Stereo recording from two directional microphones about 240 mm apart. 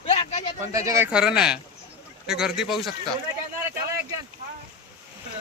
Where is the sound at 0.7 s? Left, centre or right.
Centre.